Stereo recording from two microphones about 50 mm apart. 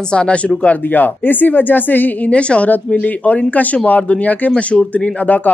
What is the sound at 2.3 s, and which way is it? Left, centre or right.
A woman's voice, left.